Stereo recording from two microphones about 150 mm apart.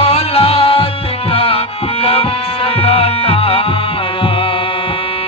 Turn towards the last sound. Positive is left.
turn(degrees=40)  # may be behind; listen again after turning